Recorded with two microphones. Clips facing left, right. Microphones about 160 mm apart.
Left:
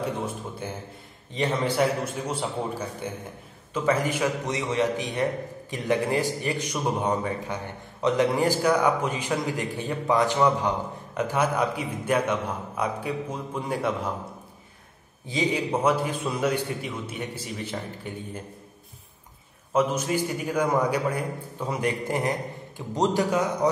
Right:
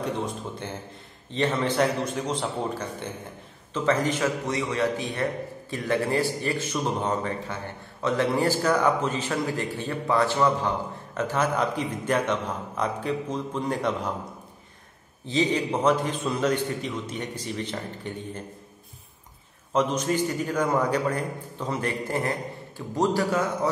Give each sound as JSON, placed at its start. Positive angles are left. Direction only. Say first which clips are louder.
{"t": 1.3, "sound": "a man's voice", "louder": "right 1 dB", "side_deg": 10}
{"t": 15.2, "sound": "a man's voice", "louder": "right 2 dB", "side_deg": 10}
{"t": 19.7, "sound": "a man's voice", "louder": "even", "side_deg": 10}